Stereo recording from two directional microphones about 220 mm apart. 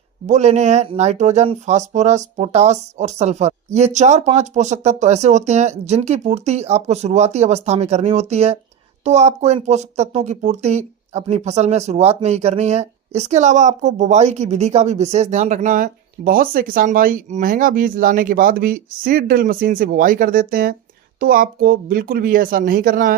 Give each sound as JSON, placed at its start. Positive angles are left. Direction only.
{"t": 0.3, "sound": "speech", "side_deg": -30}